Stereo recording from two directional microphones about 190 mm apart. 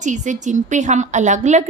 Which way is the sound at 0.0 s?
40° right (ahead or behind).